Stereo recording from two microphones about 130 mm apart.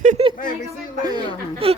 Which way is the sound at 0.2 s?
50° right (ahead or behind).